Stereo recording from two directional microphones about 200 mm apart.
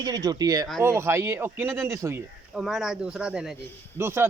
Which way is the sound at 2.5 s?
Centre (ahead or behind).